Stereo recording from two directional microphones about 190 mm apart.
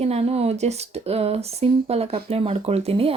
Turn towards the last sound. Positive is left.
turn(degrees=-30)  # may be behind; listen again after turning